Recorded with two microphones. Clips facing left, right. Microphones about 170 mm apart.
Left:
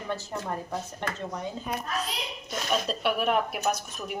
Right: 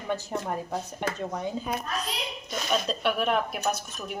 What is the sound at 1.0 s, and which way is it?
Speech, 15° right (ahead or behind).